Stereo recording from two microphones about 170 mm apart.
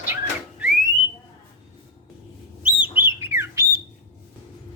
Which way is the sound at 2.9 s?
15° right (ahead or behind).